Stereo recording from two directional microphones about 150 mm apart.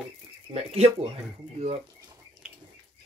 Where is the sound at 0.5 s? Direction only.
40° right (ahead or behind).